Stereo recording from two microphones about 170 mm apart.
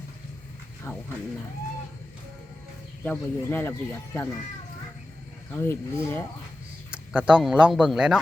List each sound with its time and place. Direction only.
0.9 s speech: 15° left (ahead or behind)
3.0 s speech: 10° left (ahead or behind)
5.5 s speech: 15° left (ahead or behind)
6.9 s speech: 5° right (ahead or behind)